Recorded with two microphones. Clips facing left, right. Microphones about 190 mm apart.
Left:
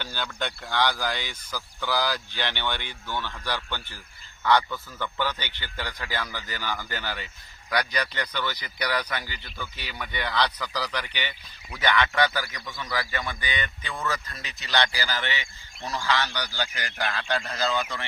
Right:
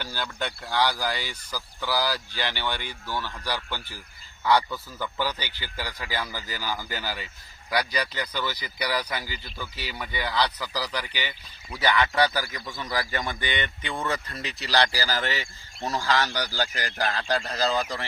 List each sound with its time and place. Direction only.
0.0 s speech: 10° right (ahead or behind)
11.9 s speech: 35° right (ahead or behind)
12.9 s speech: 40° right (ahead or behind)
13.5 s speech: 25° right (ahead or behind)